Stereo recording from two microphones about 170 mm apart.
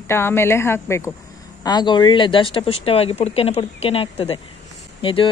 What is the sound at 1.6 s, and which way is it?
Speech, 25° left (ahead or behind).